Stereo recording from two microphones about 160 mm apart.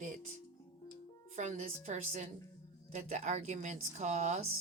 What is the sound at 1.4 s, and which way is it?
A man's voice, 45° right (ahead or behind).